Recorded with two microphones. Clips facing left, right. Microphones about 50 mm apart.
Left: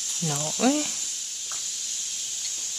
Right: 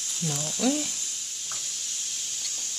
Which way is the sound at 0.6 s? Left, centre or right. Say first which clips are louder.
Left 3 dB; left.